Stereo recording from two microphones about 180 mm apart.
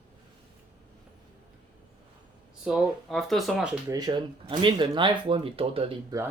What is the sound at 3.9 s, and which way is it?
Speech, 20° right (ahead or behind).